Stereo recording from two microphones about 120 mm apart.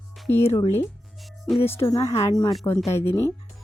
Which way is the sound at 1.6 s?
20° left (ahead or behind).